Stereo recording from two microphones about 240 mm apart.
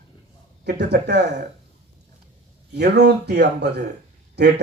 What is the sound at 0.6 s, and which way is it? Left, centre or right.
Speech, right.